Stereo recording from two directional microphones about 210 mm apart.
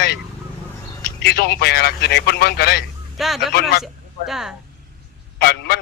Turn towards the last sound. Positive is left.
turn(degrees=45)  # may be behind; listen again after turning